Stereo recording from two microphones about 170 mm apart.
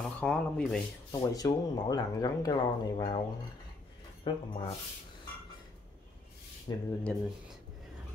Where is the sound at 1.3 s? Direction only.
20° left (ahead or behind).